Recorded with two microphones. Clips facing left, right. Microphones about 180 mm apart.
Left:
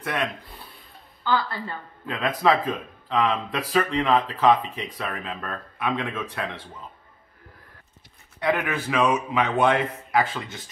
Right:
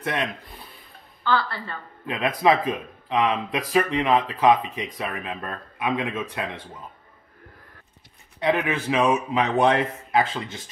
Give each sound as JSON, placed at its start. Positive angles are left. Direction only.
{"t": 0.0, "sound": "speech", "side_deg": -20}
{"t": 1.2, "sound": "a woman's voice", "side_deg": 15}
{"t": 2.0, "sound": "speech", "side_deg": -20}
{"t": 8.6, "sound": "speech", "side_deg": -20}